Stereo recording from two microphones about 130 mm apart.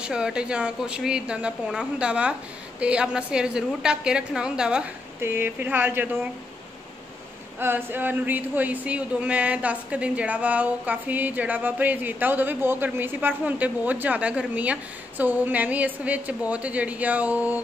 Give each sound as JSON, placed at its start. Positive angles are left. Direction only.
{"t": 0.0, "sound": "speech", "side_deg": -5}
{"t": 7.5, "sound": "speech", "side_deg": -15}